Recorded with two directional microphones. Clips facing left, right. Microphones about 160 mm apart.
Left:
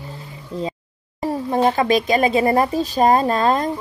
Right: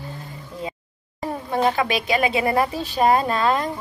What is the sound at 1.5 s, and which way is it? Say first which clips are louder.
A woman's voice: left 4 dB; 35° left (ahead or behind).